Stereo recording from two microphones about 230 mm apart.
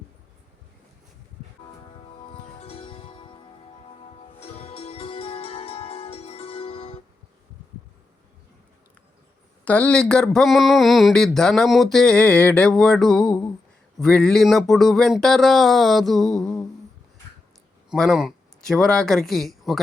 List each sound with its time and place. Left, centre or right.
2.2 s music: left
9.6 s speech: centre
17.9 s speech: centre